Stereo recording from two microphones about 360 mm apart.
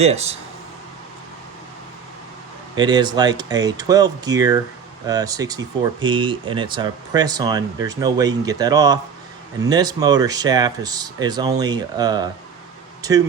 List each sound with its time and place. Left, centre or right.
0.0 s speech: centre
2.7 s speech: centre